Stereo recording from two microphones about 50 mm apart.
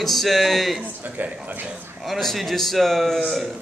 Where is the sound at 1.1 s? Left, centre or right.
Right.